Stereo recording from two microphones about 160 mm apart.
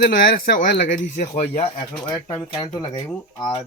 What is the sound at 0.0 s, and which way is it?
Speech, 70° left (ahead or behind).